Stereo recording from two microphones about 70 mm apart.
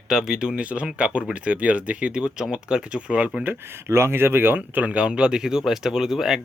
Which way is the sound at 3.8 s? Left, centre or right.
Right.